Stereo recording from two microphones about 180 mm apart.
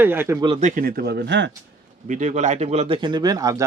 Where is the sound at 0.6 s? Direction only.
45° right (ahead or behind); by 1.5 s 75° right (ahead or behind).